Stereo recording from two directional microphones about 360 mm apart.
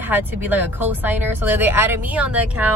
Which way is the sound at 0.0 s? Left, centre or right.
Centre.